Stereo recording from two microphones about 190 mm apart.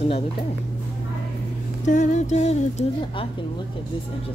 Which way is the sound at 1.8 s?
40° left (ahead or behind).